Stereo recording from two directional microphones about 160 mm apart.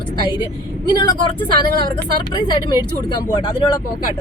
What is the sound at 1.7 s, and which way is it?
Speech, 70° right (ahead or behind).